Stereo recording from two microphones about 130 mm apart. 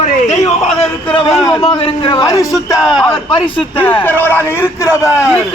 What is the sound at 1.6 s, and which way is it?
A man's voice, 45° left (ahead or behind).